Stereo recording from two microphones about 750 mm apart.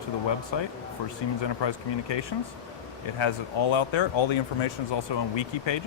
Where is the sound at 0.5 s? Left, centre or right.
Left.